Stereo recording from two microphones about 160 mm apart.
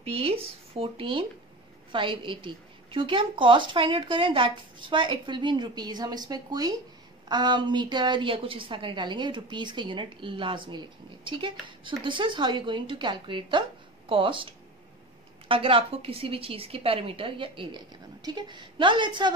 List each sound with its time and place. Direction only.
0.0 s a woman's voice: 35° right (ahead or behind)